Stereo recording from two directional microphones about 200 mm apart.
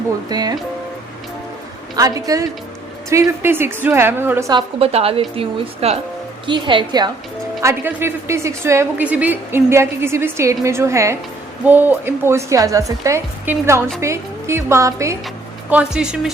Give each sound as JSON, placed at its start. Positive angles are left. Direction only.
{"t": 0.3, "sound": "a woman's voice", "side_deg": -20}
{"t": 2.0, "sound": "a woman's voice", "side_deg": -15}
{"t": 4.8, "sound": "a woman's voice", "side_deg": -30}
{"t": 7.6, "sound": "a woman's voice", "side_deg": -10}
{"t": 15.7, "sound": "a woman's voice", "side_deg": -5}